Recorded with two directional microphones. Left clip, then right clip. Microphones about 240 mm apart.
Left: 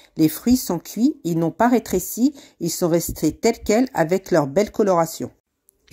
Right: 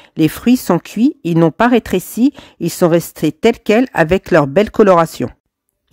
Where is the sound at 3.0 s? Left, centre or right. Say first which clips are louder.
Right 6 dB; right.